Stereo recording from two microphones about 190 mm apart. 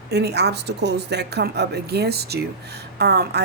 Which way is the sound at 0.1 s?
60° right (ahead or behind).